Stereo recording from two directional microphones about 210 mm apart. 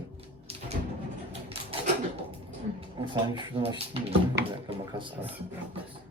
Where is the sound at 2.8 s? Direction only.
20° right (ahead or behind).